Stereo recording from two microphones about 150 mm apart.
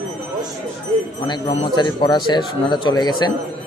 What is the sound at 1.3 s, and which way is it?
A man's voice, 30° left (ahead or behind).